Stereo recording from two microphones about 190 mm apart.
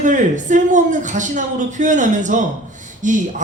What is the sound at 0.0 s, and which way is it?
A man's voice, 40° right (ahead or behind).